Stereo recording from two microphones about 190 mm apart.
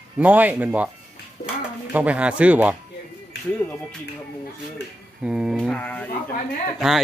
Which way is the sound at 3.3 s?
65° left (ahead or behind).